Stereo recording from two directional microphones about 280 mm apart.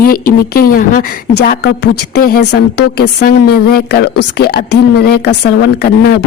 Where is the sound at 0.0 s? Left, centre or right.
Left.